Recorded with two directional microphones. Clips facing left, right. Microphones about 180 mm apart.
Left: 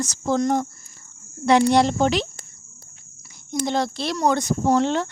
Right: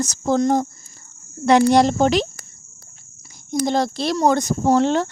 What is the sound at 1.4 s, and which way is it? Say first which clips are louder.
Speech: right 3 dB; 45° right (ahead or behind).